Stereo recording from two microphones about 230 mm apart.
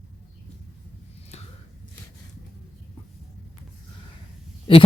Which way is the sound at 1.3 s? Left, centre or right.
Left.